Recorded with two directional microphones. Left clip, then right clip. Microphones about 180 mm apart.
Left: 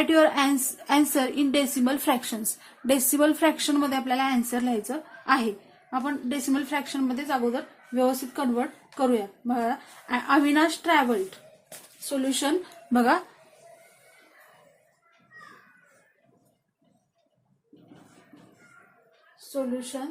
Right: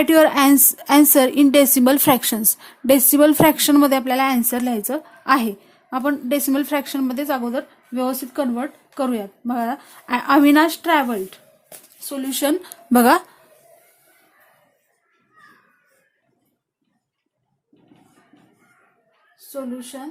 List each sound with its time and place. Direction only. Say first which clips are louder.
0.0 s a woman's voice: right 7 dB; 50° right (ahead or behind)